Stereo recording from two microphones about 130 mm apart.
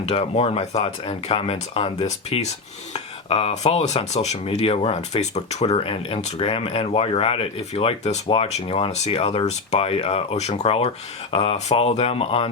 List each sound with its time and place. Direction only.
0.0 s speech: 50° left (ahead or behind)